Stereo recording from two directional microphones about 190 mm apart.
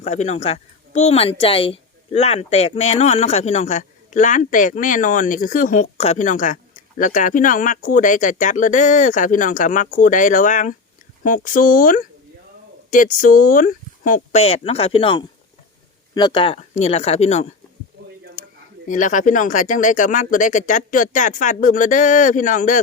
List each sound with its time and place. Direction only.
0.0 s a woman's voice: 35° left (ahead or behind)
18.4 s a sound: 40° left (ahead or behind)
18.9 s speech: 40° left (ahead or behind)